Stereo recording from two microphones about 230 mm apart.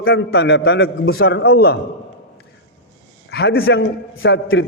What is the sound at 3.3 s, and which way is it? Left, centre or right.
A man's voice, left.